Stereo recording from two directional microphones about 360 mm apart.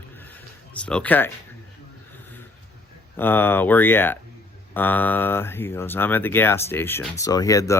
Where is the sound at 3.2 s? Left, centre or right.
Centre.